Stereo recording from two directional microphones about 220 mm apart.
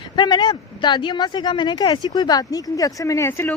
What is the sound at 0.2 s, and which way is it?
Speech, 20° left (ahead or behind).